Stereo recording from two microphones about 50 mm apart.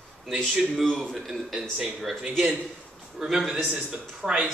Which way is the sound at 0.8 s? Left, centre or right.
Centre.